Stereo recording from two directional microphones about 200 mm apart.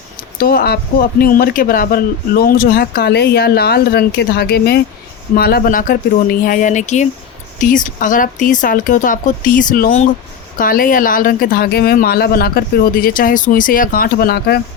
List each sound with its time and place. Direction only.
0.3 s speech: 50° left (ahead or behind)